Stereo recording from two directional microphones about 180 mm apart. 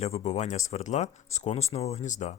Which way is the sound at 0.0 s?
35° left (ahead or behind).